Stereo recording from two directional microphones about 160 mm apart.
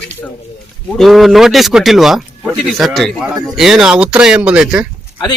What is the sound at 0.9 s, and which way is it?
Speech, centre (ahead or behind).